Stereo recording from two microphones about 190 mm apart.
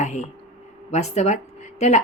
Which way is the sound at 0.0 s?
40° left (ahead or behind).